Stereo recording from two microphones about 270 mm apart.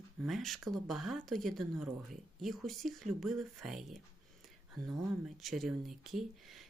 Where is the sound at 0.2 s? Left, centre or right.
Centre.